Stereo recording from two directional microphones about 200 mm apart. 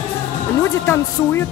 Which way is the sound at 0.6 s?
10° left (ahead or behind).